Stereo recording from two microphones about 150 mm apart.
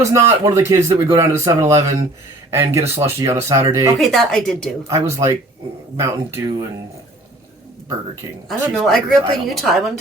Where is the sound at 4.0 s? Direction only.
Centre (ahead or behind).